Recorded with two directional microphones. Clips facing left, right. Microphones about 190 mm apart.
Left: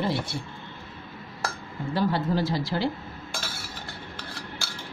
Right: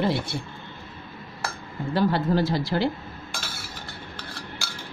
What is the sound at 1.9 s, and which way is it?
Speech, 60° right (ahead or behind).